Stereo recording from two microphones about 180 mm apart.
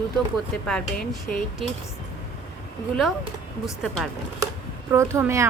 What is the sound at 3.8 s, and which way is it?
Speech, centre (ahead or behind).